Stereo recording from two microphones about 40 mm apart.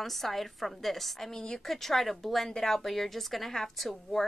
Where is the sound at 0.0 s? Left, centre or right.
Centre.